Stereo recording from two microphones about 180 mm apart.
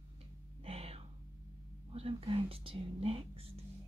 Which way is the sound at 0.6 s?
35° right (ahead or behind).